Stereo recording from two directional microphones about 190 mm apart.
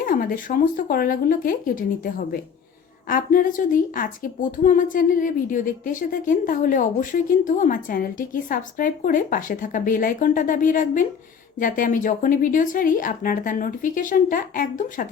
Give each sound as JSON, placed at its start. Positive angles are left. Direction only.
{"t": 0.0, "sound": "a woman's voice", "side_deg": 45}